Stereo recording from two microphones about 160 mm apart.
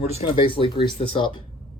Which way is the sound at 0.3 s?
30° left (ahead or behind).